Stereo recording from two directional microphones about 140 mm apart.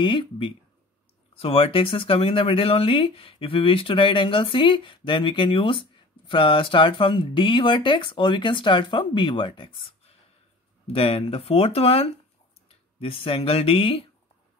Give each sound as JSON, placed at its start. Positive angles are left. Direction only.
{"t": 0.0, "sound": "speech", "side_deg": 35}